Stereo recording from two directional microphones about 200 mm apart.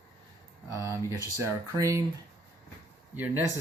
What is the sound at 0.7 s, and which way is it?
Speech, 15° right (ahead or behind).